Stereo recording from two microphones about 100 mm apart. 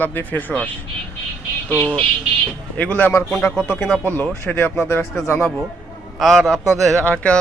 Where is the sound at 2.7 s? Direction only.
15° left (ahead or behind).